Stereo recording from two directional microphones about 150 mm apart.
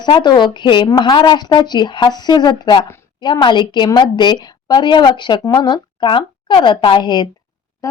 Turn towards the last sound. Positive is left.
turn(degrees=30)  # may be behind; listen again after turning